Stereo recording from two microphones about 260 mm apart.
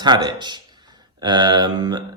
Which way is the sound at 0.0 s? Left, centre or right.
Centre.